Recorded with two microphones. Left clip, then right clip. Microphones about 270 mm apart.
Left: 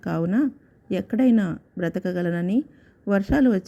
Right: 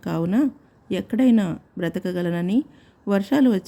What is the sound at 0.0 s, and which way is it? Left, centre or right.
Speech, centre.